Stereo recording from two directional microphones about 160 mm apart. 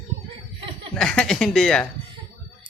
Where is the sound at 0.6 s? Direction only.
35° right (ahead or behind).